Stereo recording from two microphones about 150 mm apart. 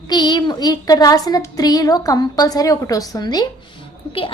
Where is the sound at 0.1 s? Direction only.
30° left (ahead or behind).